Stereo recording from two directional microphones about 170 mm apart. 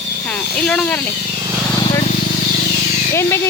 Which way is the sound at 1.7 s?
25° left (ahead or behind).